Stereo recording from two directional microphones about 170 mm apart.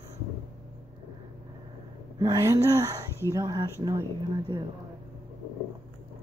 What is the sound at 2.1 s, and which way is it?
Speech, 20° right (ahead or behind).